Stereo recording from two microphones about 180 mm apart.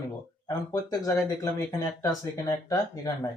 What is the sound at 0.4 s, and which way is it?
Speech, 20° left (ahead or behind).